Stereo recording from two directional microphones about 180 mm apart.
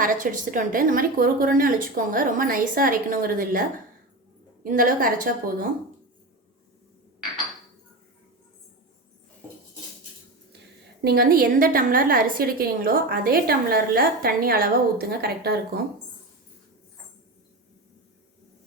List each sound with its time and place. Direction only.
0.0 s a woman's voice: 50° right (ahead or behind)
4.6 s a woman's voice: 50° right (ahead or behind)
11.0 s a woman's voice: 60° right (ahead or behind)